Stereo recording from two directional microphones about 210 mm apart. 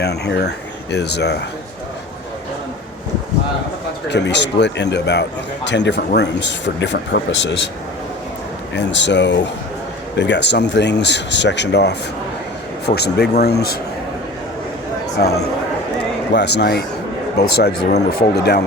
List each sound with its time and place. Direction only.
0.0 s speech: 50° left (ahead or behind)
4.1 s speech: 55° left (ahead or behind)
8.7 s a man's voice: 55° left (ahead or behind)
16.3 s a man's voice: 55° left (ahead or behind)